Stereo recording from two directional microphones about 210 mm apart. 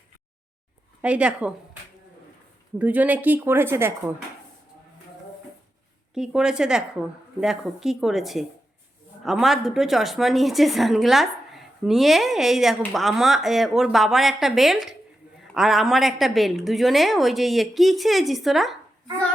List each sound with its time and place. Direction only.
1.0 s a woman's voice: 5° right (ahead or behind)
2.7 s a woman's voice: 5° right (ahead or behind)
6.1 s a woman's voice: 5° right (ahead or behind)